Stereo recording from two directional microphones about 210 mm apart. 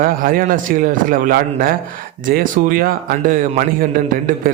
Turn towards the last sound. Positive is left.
turn(degrees=-40)  # may be behind; listen again after turning